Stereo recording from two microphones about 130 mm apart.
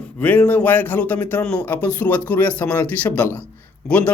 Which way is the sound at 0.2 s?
15° left (ahead or behind).